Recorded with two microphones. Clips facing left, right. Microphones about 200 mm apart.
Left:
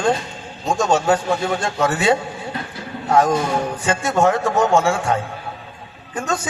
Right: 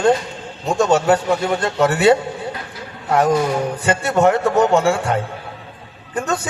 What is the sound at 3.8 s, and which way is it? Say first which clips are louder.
Speech: right 2 dB; 60° right (ahead or behind).